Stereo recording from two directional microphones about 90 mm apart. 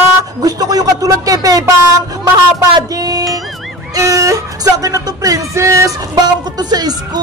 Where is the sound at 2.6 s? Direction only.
45° right (ahead or behind).